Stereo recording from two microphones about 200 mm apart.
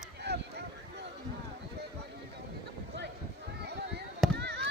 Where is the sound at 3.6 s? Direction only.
55° right (ahead or behind).